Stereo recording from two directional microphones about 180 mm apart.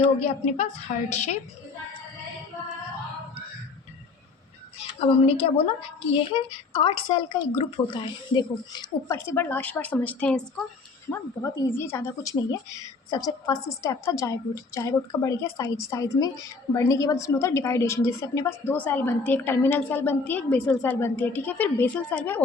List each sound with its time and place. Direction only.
0.0 s a woman's voice: 35° left (ahead or behind)
4.8 s a woman's voice: 35° left (ahead or behind)
9.1 s a woman's voice: 15° left (ahead or behind)